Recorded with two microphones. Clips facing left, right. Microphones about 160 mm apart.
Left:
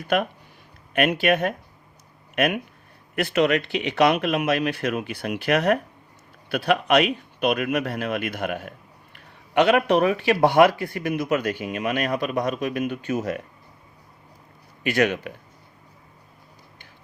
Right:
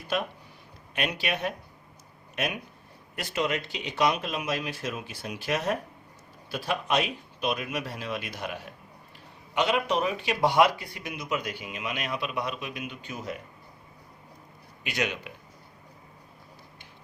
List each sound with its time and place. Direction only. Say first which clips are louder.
0.9 s a man's voice: left 10 dB; 55° left (ahead or behind)
2.3 s a man's voice: left 9 dB; 65° left (ahead or behind); by 13.2 s 50° left (ahead or behind)
14.8 s a man's voice: left 10 dB; 55° left (ahead or behind)